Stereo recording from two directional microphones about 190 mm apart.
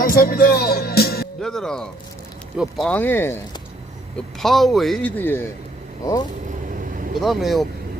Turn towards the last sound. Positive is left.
turn(degrees=0)  # may be behind; listen again after turning